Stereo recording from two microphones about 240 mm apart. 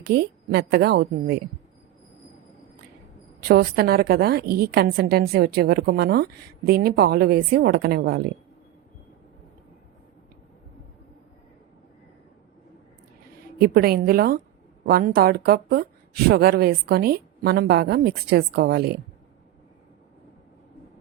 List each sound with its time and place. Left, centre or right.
0.0 s a woman's voice: right
3.4 s a woman's voice: right
13.6 s a woman's voice: right